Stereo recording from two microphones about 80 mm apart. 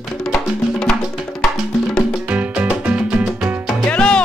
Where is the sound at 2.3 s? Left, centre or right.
Centre.